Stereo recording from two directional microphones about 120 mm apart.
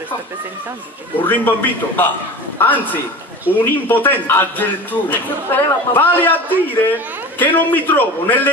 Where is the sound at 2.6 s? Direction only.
15° left (ahead or behind).